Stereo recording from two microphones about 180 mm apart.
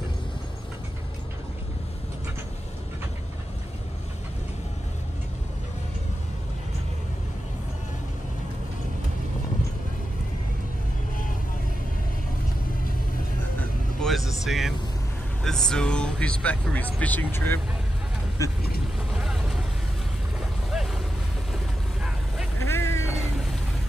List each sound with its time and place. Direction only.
14.0 s vehicle: centre (ahead or behind)
15.4 s speech: centre (ahead or behind)
18.4 s vehicle: 20° left (ahead or behind)
19.1 s vehicle: centre (ahead or behind)
20.3 s boat: centre (ahead or behind)
22.6 s vehicle: 15° left (ahead or behind)